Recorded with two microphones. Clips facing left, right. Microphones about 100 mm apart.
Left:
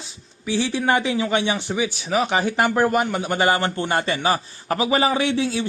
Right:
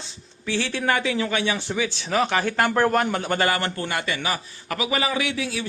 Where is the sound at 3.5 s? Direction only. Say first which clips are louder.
Left 4 dB; 20° left (ahead or behind).